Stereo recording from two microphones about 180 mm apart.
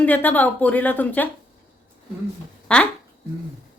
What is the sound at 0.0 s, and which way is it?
A woman's voice, 10° left (ahead or behind).